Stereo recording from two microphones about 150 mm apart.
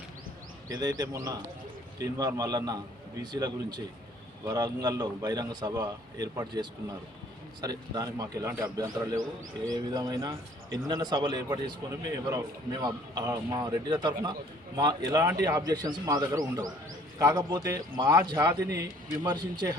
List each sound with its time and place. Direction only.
0.7 s a man's voice: 25° right (ahead or behind)